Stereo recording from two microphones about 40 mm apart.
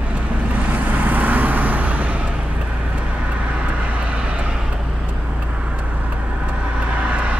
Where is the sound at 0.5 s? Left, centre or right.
Right.